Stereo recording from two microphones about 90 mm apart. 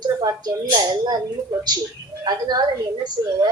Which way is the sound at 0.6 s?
55° right (ahead or behind).